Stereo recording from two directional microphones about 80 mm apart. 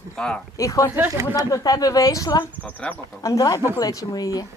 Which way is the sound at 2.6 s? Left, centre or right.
Left.